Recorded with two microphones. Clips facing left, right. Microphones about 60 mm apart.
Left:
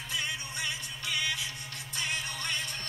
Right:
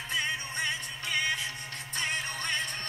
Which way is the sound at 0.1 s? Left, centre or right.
Right.